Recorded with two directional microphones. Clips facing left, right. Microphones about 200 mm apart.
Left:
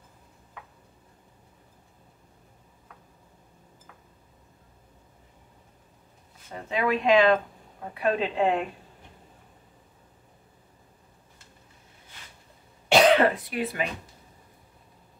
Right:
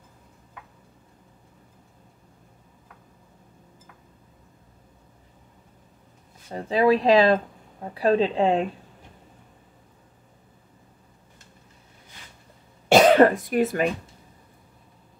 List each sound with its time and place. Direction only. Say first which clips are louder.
6.5 s speech: right 7 dB; 35° right (ahead or behind)
12.8 s cough: right 4 dB; 45° right (ahead or behind)